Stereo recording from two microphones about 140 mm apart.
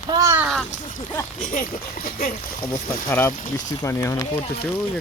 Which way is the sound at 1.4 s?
75° left (ahead or behind).